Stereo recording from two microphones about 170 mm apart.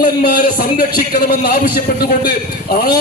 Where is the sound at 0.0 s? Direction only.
55° left (ahead or behind).